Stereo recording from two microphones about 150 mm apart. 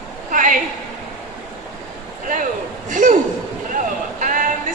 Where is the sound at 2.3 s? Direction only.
60° right (ahead or behind).